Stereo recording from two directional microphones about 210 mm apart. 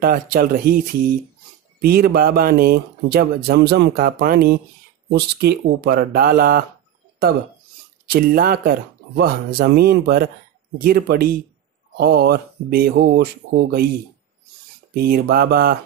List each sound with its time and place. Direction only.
0.0 s speech: 45° right (ahead or behind)
8.1 s speech: 45° right (ahead or behind)
15.0 s speech: 50° right (ahead or behind)